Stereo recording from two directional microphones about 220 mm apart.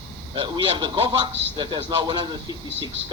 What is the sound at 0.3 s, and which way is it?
A man's voice, 20° right (ahead or behind).